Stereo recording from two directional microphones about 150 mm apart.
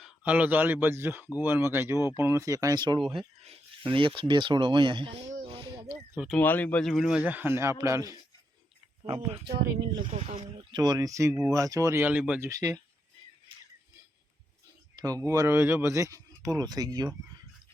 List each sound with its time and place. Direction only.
0.0 s a man's voice: 10° right (ahead or behind); by 5.2 s 35° right (ahead or behind)
5.5 s a sound: 35° right (ahead or behind)
6.3 s a man's voice: 10° left (ahead or behind); by 8.1 s 20° right (ahead or behind)
9.4 s speech: 90° right
9.9 s speech: 40° right (ahead or behind)
10.7 s a man's voice: 25° right (ahead or behind); by 12.5 s 10° right (ahead or behind)
12.5 s speech: 20° right (ahead or behind)
13.5 s music: 35° right (ahead or behind)
14.9 s speech: 25° right (ahead or behind)